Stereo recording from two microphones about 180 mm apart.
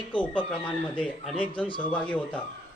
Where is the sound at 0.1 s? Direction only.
10° left (ahead or behind).